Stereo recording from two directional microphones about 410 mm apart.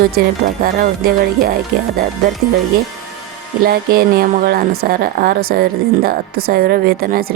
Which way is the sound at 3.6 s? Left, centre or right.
Right.